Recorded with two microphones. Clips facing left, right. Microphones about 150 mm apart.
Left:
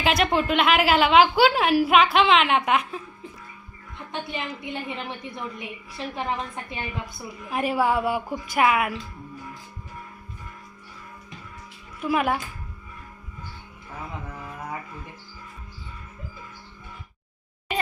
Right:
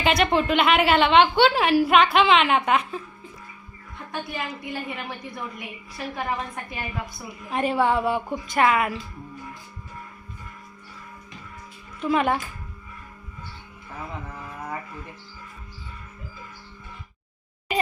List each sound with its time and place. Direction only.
0.0 s a woman's voice: centre (ahead or behind)
4.1 s a woman's voice: 25° left (ahead or behind)
7.5 s a woman's voice: 5° left (ahead or behind)
11.9 s speech: 5° left (ahead or behind)